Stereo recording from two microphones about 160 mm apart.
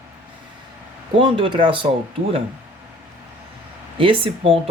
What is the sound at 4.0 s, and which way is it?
Speech, 35° right (ahead or behind).